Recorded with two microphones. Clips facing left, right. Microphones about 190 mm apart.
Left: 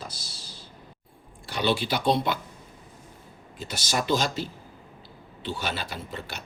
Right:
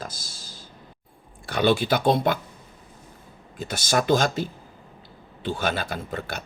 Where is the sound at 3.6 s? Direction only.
50° right (ahead or behind).